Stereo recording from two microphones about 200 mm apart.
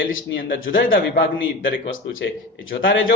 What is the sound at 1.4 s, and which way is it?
Speech, 70° left (ahead or behind).